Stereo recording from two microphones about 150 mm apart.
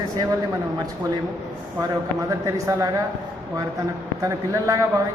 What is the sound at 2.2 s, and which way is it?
Speech, 20° right (ahead or behind).